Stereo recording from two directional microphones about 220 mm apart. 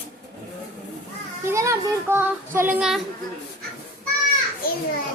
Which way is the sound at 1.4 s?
15° right (ahead or behind).